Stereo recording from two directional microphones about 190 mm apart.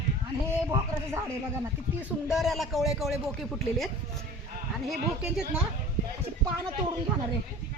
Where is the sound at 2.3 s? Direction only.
Centre (ahead or behind).